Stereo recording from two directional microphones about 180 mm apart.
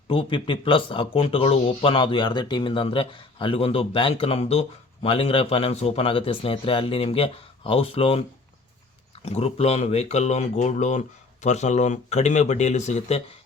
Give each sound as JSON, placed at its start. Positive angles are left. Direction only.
{"t": 0.1, "sound": "speech", "side_deg": 30}
{"t": 9.2, "sound": "speech", "side_deg": 35}